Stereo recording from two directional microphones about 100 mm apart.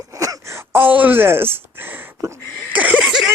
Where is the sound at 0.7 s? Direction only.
20° right (ahead or behind).